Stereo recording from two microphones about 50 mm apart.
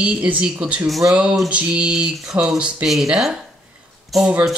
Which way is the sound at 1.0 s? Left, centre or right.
Centre.